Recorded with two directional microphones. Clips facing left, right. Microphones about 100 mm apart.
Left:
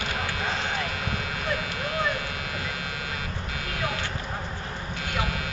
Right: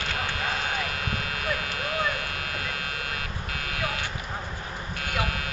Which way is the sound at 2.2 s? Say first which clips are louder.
Left 1 dB; 65° right (ahead or behind).